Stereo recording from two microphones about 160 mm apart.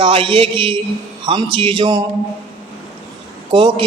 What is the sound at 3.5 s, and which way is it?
Speech, 30° right (ahead or behind).